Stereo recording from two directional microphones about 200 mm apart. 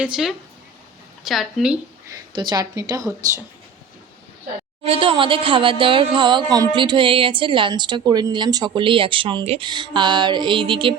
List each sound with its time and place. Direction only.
0.0 s a woman's voice: 5° right (ahead or behind)
2.1 s speech: 20° right (ahead or behind)
4.9 s speech: 25° right (ahead or behind)